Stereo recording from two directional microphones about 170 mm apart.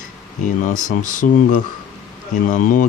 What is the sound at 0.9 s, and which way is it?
Speech, 50° left (ahead or behind).